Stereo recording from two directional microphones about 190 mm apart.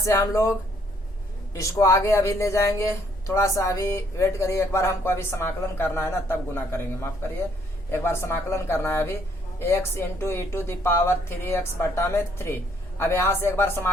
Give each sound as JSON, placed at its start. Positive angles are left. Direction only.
{"t": 0.0, "sound": "speech", "side_deg": 15}
{"t": 1.5, "sound": "speech", "side_deg": 15}